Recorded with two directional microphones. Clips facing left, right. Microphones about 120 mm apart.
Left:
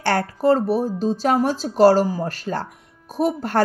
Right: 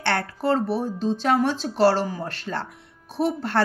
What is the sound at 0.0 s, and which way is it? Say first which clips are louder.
A woman's voice: left 5 dB; 40° left (ahead or behind).